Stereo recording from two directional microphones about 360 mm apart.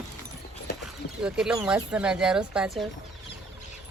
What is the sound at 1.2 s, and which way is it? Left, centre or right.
Speech, centre.